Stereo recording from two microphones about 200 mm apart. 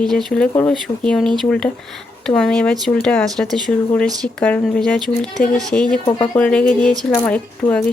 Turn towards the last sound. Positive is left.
turn(degrees=5)  # may be behind; listen again after turning